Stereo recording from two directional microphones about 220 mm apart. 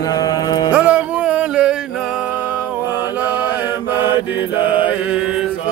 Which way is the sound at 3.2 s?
5° right (ahead or behind).